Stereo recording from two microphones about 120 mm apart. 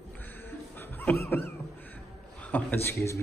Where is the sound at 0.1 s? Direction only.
15° left (ahead or behind).